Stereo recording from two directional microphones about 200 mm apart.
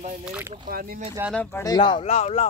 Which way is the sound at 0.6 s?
45° right (ahead or behind).